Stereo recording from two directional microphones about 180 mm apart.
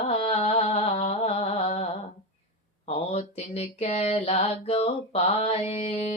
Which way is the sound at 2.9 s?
35° left (ahead or behind).